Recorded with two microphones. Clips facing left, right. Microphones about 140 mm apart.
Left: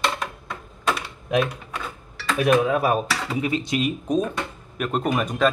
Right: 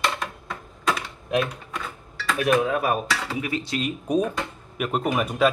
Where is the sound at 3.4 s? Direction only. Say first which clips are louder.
Left 4 dB; 20° left (ahead or behind).